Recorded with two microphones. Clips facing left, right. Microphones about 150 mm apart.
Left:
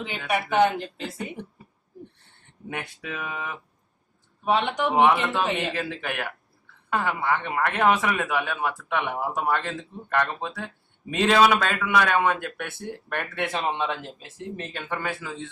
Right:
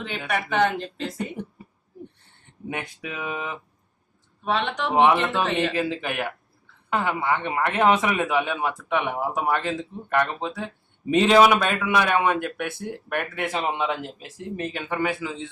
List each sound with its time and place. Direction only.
0.3 s speech: 10° left (ahead or behind)
2.6 s a man's voice: 15° right (ahead or behind)
4.4 s speech: 15° left (ahead or behind)
4.9 s a man's voice: 20° right (ahead or behind)
5.5 s speech: 15° left (ahead or behind)
5.7 s a man's voice: 15° right (ahead or behind)